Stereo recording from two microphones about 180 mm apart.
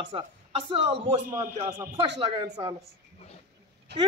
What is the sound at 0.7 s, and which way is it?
Speech, 30° right (ahead or behind).